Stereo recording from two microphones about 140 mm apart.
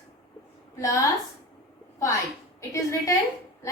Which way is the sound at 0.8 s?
25° left (ahead or behind).